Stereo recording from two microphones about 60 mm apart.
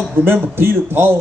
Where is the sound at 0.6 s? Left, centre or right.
Right.